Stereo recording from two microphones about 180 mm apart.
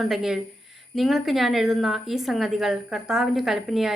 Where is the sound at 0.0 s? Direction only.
Centre (ahead or behind).